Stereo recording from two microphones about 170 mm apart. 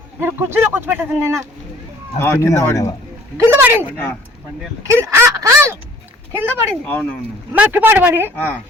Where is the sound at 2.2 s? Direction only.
15° left (ahead or behind).